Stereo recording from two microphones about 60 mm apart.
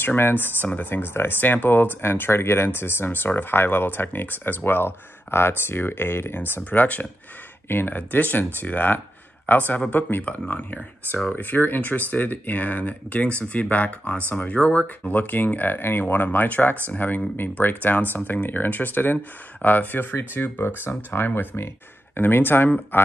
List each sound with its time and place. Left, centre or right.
0.0 s speech: left
7.6 s speech: left